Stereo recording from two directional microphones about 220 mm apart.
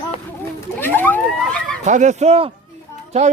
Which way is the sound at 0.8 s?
10° left (ahead or behind).